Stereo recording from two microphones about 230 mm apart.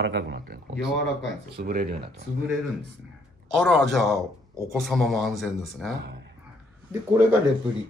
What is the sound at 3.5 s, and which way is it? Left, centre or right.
Speech, centre.